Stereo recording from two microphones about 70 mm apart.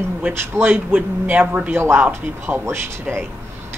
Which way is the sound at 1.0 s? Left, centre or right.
Centre.